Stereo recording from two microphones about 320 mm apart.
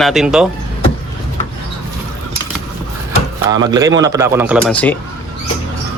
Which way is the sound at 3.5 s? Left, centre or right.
Centre.